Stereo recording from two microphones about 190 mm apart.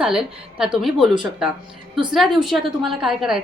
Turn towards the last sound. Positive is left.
turn(degrees=-5)  # may be behind; listen again after turning